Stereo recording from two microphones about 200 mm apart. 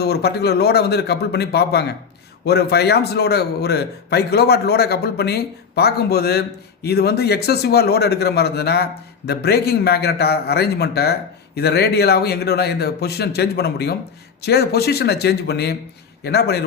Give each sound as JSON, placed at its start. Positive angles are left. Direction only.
{"t": 0.0, "sound": "speech", "side_deg": 55}